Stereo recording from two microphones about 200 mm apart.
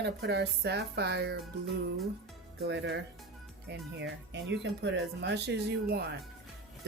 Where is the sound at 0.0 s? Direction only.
55° right (ahead or behind).